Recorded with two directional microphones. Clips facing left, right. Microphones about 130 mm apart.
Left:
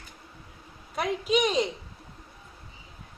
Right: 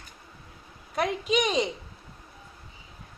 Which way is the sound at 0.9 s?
Centre (ahead or behind).